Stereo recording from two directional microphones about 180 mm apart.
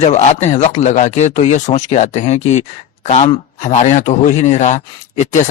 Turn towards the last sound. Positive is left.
turn(degrees=40)  # may be behind; listen again after turning